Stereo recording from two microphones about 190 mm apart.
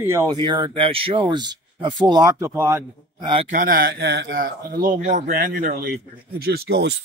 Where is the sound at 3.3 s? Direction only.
30° right (ahead or behind).